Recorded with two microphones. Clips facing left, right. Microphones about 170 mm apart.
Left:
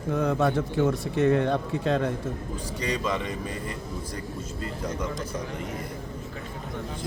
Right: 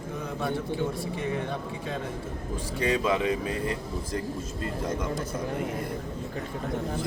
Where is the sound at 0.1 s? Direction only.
85° left.